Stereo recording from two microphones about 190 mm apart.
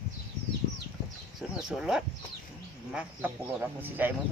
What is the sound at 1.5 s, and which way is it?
Speech, 5° right (ahead or behind).